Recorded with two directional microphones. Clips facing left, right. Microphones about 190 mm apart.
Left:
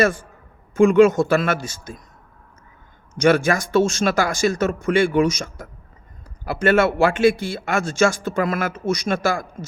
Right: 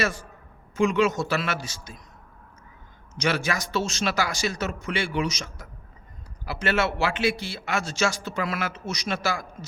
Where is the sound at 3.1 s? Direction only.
50° left (ahead or behind).